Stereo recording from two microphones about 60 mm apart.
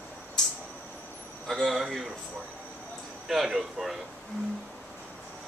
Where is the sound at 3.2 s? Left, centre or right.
Centre.